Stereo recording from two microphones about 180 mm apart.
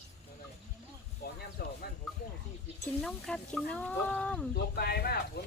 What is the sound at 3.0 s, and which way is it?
Speech, 5° left (ahead or behind).